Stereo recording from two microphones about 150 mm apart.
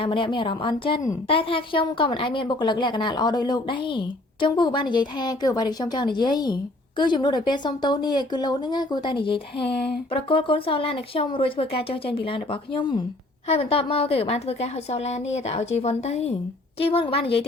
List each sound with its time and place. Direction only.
0.0 s a woman's voice: 35° left (ahead or behind)